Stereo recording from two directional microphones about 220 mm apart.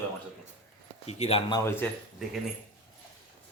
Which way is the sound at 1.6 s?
10° left (ahead or behind).